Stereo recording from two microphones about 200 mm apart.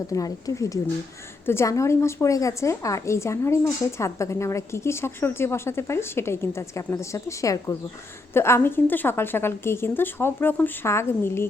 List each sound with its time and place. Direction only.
0.1 s a woman's voice: 15° left (ahead or behind)